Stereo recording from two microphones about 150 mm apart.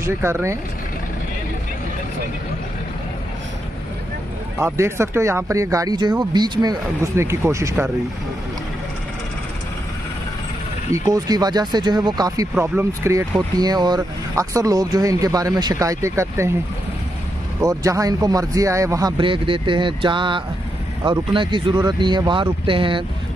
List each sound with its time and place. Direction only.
0.0 s speech: 15° right (ahead or behind)
4.6 s speech: 15° right (ahead or behind)
10.9 s speech: 25° right (ahead or behind)
12.5 s speech: 15° right (ahead or behind)
17.6 s speech: 20° right (ahead or behind)